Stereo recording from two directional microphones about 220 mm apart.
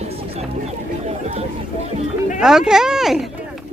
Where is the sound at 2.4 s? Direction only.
5° right (ahead or behind).